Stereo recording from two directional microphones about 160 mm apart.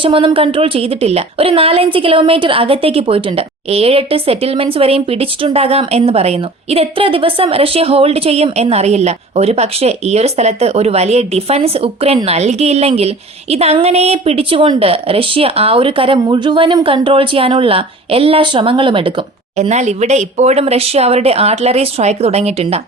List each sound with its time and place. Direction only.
0.0 s a woman's voice: 30° right (ahead or behind)
19.5 s a woman's voice: 45° right (ahead or behind)